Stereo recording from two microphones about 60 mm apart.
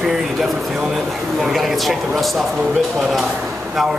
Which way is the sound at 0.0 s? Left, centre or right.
Centre.